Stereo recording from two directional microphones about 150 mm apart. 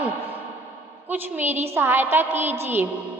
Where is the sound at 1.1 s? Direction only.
15° right (ahead or behind).